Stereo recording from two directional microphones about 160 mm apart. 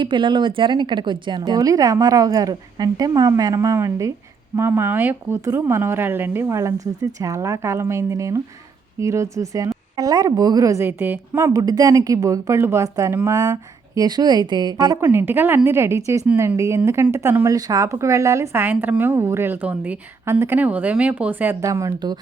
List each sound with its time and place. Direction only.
0.0 s a woman's voice: 30° right (ahead or behind)
15.0 s speech: 15° right (ahead or behind)